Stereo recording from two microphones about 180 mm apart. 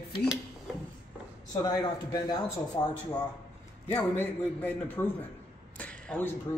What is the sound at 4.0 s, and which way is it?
A man's voice, 10° left (ahead or behind).